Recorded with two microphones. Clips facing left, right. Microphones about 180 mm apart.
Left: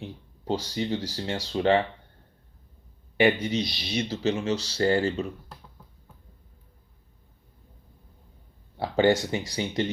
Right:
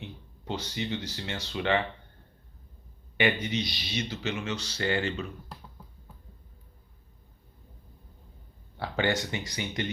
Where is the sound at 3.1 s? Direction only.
35° left (ahead or behind).